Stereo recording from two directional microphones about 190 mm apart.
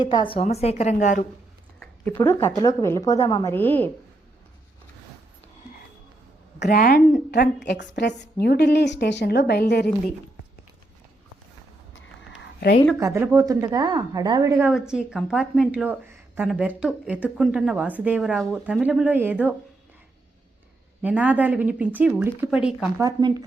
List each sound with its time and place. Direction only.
0.0 s a woman's voice: 25° left (ahead or behind); by 1.3 s 40° left (ahead or behind)
1.8 s a woman's voice: 10° left (ahead or behind)
6.6 s a woman's voice: 50° left (ahead or behind)
12.4 s a sound: 60° left (ahead or behind)
13.0 s a woman's voice: 15° right (ahead or behind)
14.7 s a woman's voice: 5° right (ahead or behind)
21.0 s a woman's voice: 10° right (ahead or behind)
23.0 s speech: 20° right (ahead or behind)